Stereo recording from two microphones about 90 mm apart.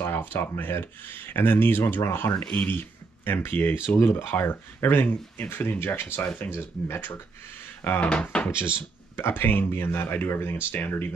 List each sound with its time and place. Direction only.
0.0 s speech: 25° left (ahead or behind)
2.4 s speech: 15° left (ahead or behind)
9.1 s speech: 25° left (ahead or behind)